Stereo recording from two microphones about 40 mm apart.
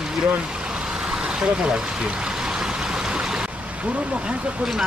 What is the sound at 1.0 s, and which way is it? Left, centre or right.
Vehicle, right.